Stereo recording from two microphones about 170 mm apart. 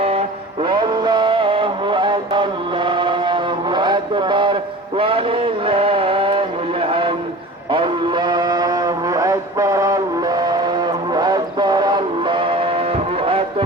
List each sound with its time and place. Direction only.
0.0 s music: 35° right (ahead or behind)
4.9 s mantra: 35° right (ahead or behind)
7.7 s a sound: 30° right (ahead or behind)